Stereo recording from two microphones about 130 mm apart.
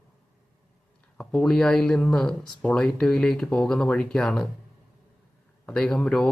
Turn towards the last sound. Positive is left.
turn(degrees=5)  # may be behind; listen again after turning